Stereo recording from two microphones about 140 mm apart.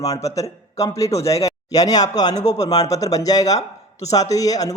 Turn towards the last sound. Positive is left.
turn(degrees=25)  # may be behind; listen again after turning